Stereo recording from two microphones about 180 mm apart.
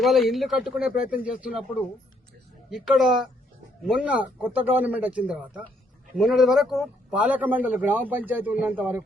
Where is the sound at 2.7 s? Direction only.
Centre (ahead or behind).